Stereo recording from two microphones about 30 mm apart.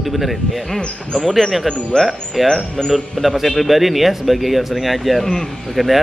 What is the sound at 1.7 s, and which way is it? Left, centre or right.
Speech, centre.